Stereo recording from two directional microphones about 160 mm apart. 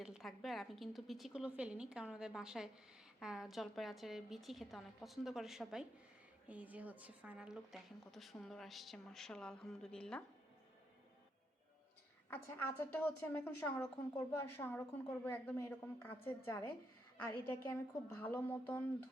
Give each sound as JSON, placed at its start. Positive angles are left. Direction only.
{"t": 0.0, "sound": "a woman's voice", "side_deg": 0}
{"t": 12.3, "sound": "a woman's voice", "side_deg": 15}